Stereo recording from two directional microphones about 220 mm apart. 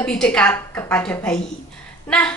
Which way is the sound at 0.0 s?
5° left (ahead or behind).